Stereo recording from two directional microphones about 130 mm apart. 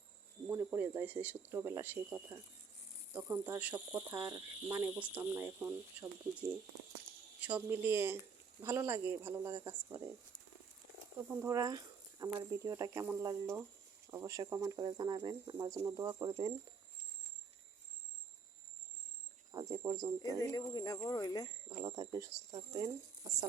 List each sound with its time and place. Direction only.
0.5 s speech: 20° right (ahead or behind)
4.1 s speech: 30° right (ahead or behind)
4.8 s speech: 10° right (ahead or behind)
11.3 s speech: 25° right (ahead or behind)
19.7 s speech: 30° right (ahead or behind)
20.4 s speech: 30° left (ahead or behind)
21.7 s speech: 30° right (ahead or behind)